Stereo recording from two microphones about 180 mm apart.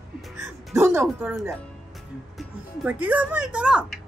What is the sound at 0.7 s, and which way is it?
Music, 15° right (ahead or behind).